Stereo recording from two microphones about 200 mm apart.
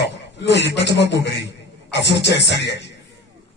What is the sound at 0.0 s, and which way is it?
A man's voice, 60° left (ahead or behind).